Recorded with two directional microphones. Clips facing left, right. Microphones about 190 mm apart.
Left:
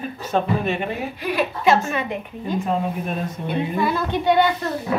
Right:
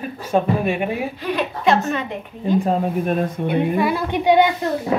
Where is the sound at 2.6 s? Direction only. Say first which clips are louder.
Right 4 dB; 50° right (ahead or behind).